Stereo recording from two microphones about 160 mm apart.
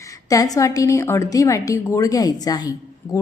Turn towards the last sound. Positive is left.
turn(degrees=25)  # may be behind; listen again after turning